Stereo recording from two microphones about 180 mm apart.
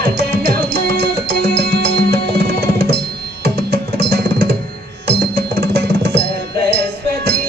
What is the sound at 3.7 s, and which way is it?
Music, 60° right (ahead or behind).